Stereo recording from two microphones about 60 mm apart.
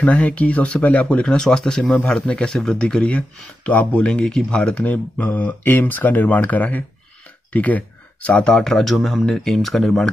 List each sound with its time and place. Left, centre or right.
0.0 s speech: left
1.2 s speech: centre